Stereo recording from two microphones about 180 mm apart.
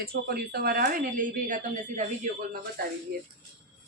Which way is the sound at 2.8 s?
60° right (ahead or behind).